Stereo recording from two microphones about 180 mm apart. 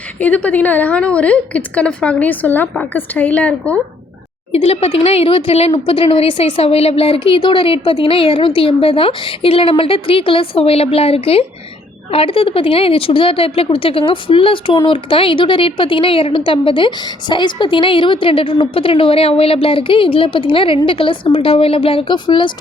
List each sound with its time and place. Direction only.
0.2 s a woman's voice: 10° left (ahead or behind)
4.5 s a woman's voice: 35° left (ahead or behind)